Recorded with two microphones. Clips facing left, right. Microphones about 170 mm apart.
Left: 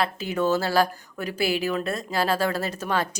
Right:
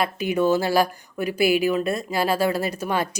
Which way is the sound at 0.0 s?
15° right (ahead or behind).